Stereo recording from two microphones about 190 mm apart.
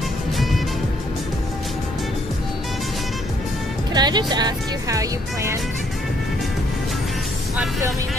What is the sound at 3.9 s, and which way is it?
Speech, 20° right (ahead or behind).